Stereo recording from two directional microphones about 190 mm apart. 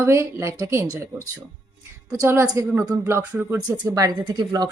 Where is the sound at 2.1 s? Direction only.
15° right (ahead or behind).